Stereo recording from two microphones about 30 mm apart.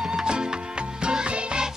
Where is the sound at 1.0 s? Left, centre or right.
Right.